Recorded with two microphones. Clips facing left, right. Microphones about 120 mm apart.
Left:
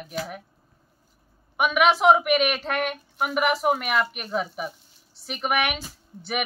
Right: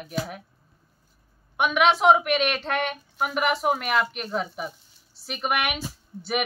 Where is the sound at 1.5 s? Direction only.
5° left (ahead or behind).